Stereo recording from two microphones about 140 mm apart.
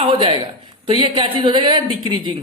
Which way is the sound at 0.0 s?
40° right (ahead or behind).